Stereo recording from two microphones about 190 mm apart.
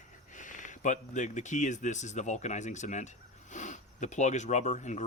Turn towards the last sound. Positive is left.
turn(degrees=40)  # may be behind; listen again after turning